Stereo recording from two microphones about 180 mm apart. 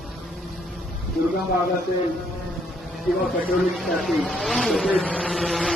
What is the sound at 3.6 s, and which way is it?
Speech, centre (ahead or behind).